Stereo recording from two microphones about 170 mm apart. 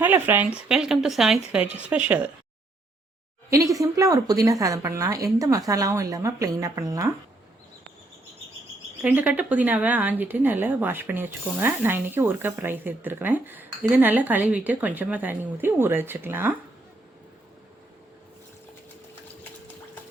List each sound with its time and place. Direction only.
0.0 s a woman's voice: 10° right (ahead or behind)
3.5 s a woman's voice: 20° right (ahead or behind)
9.0 s a woman's voice: 10° right (ahead or behind)